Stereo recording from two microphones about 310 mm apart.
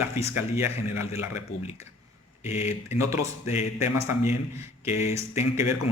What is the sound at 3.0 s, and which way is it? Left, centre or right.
Speech, centre.